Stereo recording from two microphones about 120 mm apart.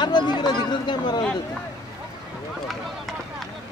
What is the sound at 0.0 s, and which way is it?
Chatter, 40° left (ahead or behind).